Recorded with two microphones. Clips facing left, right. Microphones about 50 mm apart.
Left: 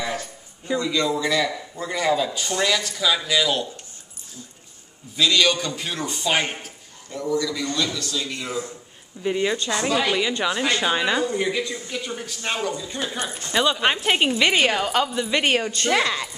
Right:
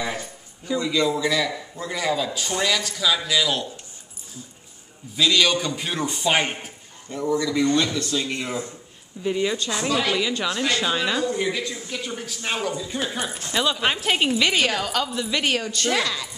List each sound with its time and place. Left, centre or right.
0.0 s a sound: centre
0.7 s a woman's voice: centre
5.1 s a man's voice: centre; by 8.6 s right
9.2 s a woman's voice: centre
15.0 s a woman's voice: centre
15.3 s a man's voice: left